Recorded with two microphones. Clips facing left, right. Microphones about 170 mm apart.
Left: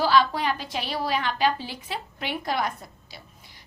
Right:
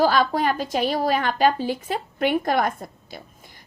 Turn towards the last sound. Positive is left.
turn(degrees=-50)  # may be behind; listen again after turning